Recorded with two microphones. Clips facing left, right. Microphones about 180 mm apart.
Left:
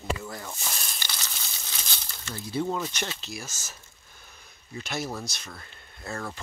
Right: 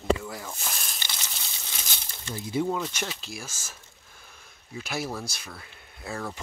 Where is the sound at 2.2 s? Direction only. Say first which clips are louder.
Right 2 dB; 15° right (ahead or behind).